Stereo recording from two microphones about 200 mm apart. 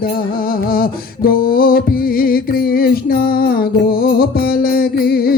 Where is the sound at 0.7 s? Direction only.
45° left (ahead or behind).